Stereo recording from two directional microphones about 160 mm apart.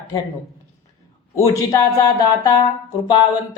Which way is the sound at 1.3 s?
20° left (ahead or behind).